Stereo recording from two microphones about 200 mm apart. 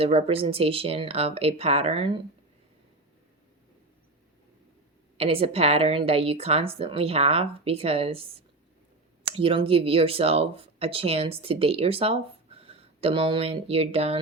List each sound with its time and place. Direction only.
0.0 s speech: 30° right (ahead or behind)
5.1 s speech: 30° right (ahead or behind)